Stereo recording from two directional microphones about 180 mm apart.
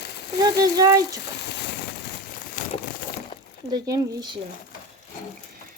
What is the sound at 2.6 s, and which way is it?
Crumpling, 45° left (ahead or behind).